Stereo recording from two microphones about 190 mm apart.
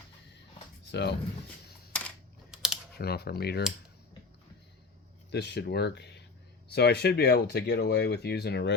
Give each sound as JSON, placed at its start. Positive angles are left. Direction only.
{"t": 0.9, "sound": "speech", "side_deg": 65}
{"t": 1.9, "sound": "computer keyboard", "side_deg": 0}
{"t": 3.0, "sound": "speech", "side_deg": 55}
{"t": 5.3, "sound": "speech", "side_deg": 60}